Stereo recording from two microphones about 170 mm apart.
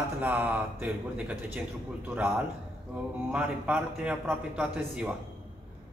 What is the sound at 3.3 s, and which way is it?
A woman's voice, 10° right (ahead or behind).